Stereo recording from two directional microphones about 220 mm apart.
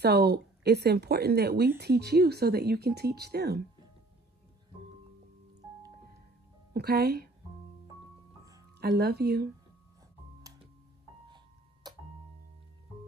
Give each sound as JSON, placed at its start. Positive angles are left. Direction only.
{"t": 0.0, "sound": "speech", "side_deg": -45}
{"t": 6.7, "sound": "speech", "side_deg": -45}
{"t": 8.7, "sound": "speech", "side_deg": -50}
{"t": 11.2, "sound": "music", "side_deg": -20}